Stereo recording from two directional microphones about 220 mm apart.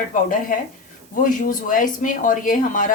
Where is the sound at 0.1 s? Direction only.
35° left (ahead or behind).